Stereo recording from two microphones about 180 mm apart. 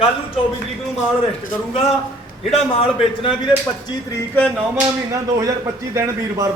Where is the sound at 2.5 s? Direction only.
30° left (ahead or behind).